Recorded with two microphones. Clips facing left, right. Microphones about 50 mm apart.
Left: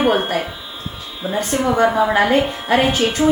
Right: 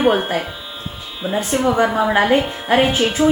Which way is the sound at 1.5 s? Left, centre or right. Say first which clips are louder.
Right 1 dB; right.